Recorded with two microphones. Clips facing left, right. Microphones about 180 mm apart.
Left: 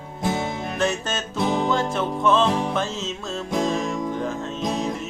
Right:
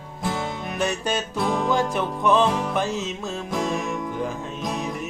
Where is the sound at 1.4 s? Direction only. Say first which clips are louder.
Left 4 dB; 20° left (ahead or behind).